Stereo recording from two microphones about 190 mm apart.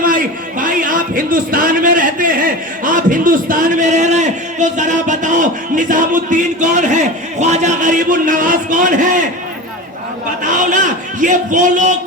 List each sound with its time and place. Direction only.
0.0 s a man's voice: 45° right (ahead or behind)
10.4 s a man's voice: 45° right (ahead or behind)